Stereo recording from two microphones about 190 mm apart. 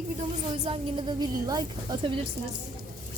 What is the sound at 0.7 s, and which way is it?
A woman's voice, 25° right (ahead or behind).